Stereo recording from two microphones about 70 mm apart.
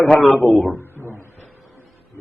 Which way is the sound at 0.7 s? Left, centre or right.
Left.